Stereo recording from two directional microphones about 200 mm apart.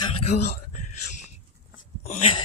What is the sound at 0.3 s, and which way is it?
Speech, 55° left (ahead or behind).